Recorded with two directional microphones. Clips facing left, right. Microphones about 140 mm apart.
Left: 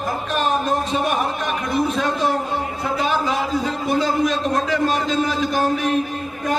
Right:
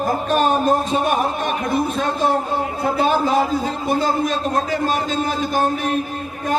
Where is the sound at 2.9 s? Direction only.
45° right (ahead or behind).